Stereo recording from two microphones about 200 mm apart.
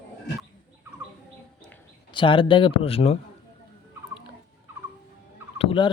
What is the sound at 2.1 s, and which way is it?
Speech, 25° left (ahead or behind).